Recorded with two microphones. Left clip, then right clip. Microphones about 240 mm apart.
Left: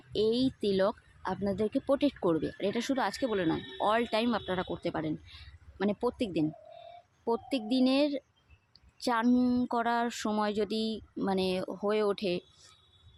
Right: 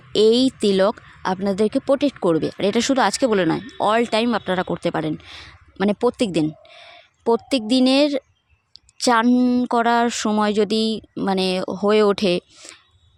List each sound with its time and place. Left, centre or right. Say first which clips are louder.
0.1 s speech: right 13 dB; right